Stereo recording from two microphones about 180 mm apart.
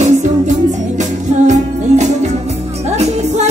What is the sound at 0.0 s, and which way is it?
Music, 45° right (ahead or behind).